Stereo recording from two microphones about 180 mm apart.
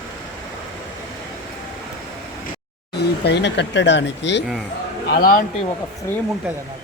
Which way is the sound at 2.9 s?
70° left (ahead or behind).